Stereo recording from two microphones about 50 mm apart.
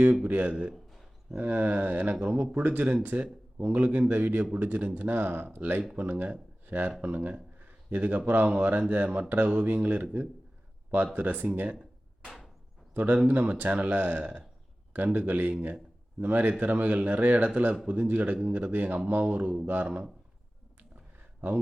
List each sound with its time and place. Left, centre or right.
0.0 s speech: right
12.9 s speech: right
20.9 s a sound: right